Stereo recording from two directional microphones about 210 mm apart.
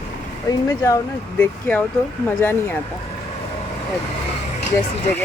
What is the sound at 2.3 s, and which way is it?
Speech, 10° left (ahead or behind).